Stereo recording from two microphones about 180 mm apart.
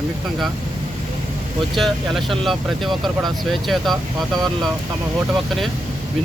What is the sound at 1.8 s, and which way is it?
Speech, centre (ahead or behind).